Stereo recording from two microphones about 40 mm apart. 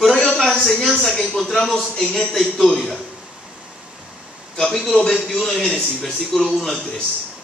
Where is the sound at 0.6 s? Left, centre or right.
Centre.